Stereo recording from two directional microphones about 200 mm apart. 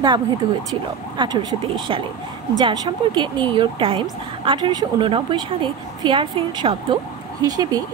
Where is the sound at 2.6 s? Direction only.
25° right (ahead or behind).